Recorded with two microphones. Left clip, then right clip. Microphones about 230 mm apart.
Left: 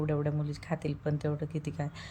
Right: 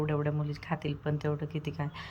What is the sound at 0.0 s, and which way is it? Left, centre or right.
Speech, centre.